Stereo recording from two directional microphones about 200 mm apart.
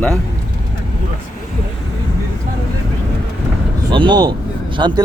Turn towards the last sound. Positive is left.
turn(degrees=-20)  # may be behind; listen again after turning